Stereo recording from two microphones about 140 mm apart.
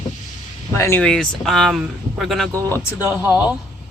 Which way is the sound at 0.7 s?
20° left (ahead or behind).